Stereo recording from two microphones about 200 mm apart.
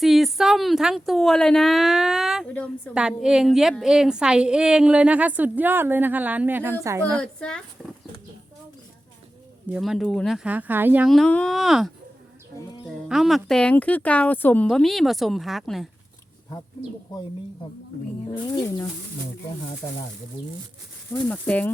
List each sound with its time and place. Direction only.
0.0 s a woman's voice: centre (ahead or behind)
2.9 s a woman's voice: 5° right (ahead or behind)
7.2 s a woman's voice: 5° left (ahead or behind)
9.6 s a woman's voice: 5° right (ahead or behind)
13.1 s a woman's voice: centre (ahead or behind)
18.5 s speech: 15° left (ahead or behind)
21.1 s speech: 5° left (ahead or behind)